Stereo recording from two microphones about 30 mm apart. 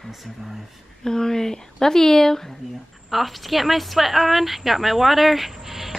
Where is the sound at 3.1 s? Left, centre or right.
Centre.